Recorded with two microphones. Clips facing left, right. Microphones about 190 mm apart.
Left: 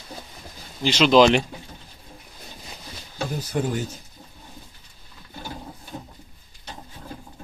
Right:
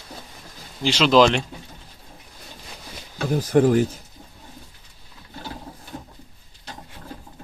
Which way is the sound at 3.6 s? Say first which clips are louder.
Right 9 dB; 55° right (ahead or behind).